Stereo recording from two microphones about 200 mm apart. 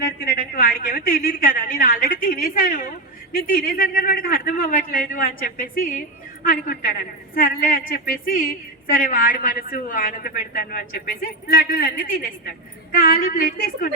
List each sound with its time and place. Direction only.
0.0 s a man's voice: 50° left (ahead or behind)